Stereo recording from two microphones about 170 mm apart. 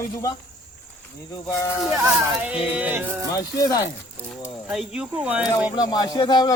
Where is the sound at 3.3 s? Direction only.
20° left (ahead or behind).